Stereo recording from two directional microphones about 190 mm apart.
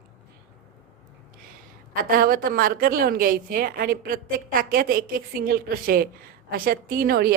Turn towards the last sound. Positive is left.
turn(degrees=-50)  # may be behind; listen again after turning